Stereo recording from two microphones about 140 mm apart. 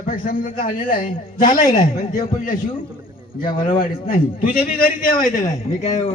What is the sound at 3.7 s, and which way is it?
A man's voice, 80° left.